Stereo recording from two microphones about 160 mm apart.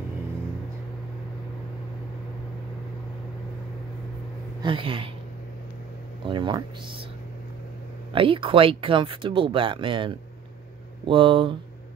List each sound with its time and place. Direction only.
4.6 s speech: 30° right (ahead or behind)
6.2 s speech: 30° right (ahead or behind)
8.1 s speech: 35° right (ahead or behind)